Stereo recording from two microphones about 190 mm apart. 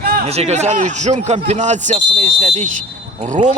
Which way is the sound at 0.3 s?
35° right (ahead or behind).